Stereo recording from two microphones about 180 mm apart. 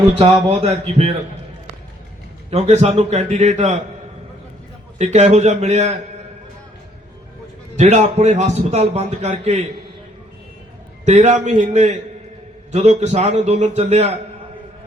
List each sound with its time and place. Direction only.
0.2 s a man's voice: 35° right (ahead or behind)
2.5 s a man's voice: 35° right (ahead or behind)
4.9 s a man's voice: 40° right (ahead or behind)
7.8 s a man's voice: 40° right (ahead or behind)
11.0 s a man's voice: 40° right (ahead or behind)